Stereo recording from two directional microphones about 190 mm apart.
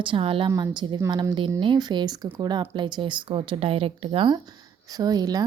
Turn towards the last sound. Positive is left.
turn(degrees=-20)  # may be behind; listen again after turning